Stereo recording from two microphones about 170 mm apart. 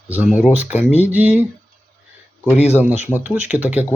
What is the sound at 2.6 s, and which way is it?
Speech, 40° left (ahead or behind).